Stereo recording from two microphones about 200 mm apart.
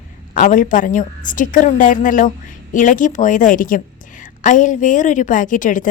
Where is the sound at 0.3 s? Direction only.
40° left (ahead or behind).